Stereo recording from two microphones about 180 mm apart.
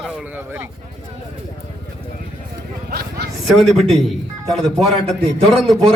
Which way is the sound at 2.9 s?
60° right (ahead or behind).